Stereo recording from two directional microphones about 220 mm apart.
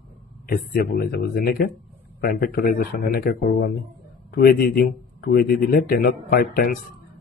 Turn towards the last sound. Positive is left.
turn(degrees=40)  # may be behind; listen again after turning